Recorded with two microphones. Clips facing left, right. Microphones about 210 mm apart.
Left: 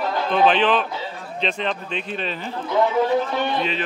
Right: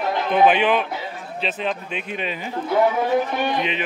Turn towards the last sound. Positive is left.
turn(degrees=-15)  # may be behind; listen again after turning